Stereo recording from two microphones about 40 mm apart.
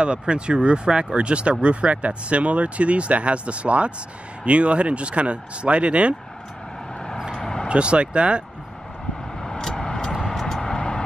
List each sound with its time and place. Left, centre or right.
0.0 s speech: right
7.6 s speech: right
9.4 s vehicle: centre
10.6 s vehicle: left